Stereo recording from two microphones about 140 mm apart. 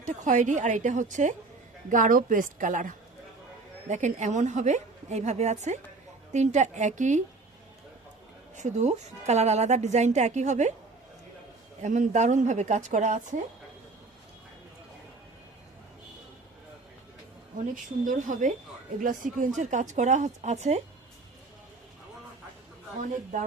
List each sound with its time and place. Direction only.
0.0 s a woman's voice: 60° right (ahead or behind)
1.9 s a woman's voice: 75° right (ahead or behind)
3.8 s a woman's voice: 60° right (ahead or behind)
8.5 s a woman's voice: 55° right (ahead or behind)
11.8 s a woman's voice: 60° right (ahead or behind)
18.0 s a woman's voice: 70° right (ahead or behind)
19.5 s a woman's voice: 60° right (ahead or behind)
23.0 s a woman's voice: 65° right (ahead or behind)